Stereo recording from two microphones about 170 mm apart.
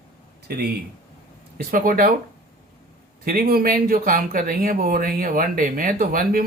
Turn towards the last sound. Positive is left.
turn(degrees=-60)  # may be behind; listen again after turning